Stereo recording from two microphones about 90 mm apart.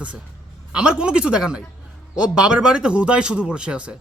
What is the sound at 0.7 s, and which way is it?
A man's voice, 10° right (ahead or behind).